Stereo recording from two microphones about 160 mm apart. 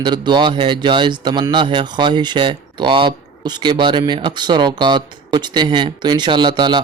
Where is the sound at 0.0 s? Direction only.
30° right (ahead or behind).